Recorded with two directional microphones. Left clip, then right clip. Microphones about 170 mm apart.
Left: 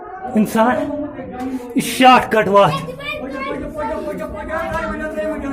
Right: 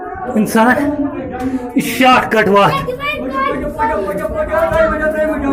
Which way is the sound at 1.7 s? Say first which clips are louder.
Even; 40° left (ahead or behind).